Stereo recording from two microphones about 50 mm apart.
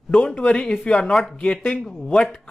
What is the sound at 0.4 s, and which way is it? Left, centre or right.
Speech, left.